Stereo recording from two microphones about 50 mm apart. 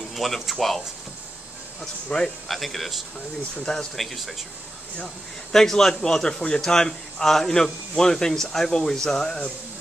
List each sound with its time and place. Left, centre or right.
0.1 s speech: centre
1.8 s speech: centre
2.4 s speech: centre